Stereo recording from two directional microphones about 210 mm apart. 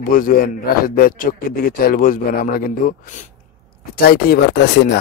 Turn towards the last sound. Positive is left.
turn(degrees=50)  # may be behind; listen again after turning